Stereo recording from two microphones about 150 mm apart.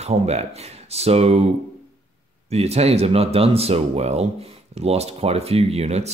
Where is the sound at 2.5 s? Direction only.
45° right (ahead or behind).